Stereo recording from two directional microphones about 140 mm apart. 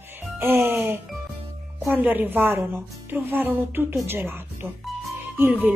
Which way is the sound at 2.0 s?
15° right (ahead or behind).